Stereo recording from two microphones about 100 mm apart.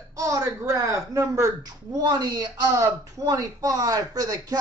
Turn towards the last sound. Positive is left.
turn(degrees=-40)  # may be behind; listen again after turning